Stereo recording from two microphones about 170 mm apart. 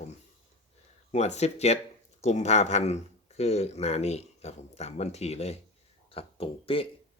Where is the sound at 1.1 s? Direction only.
40° left (ahead or behind).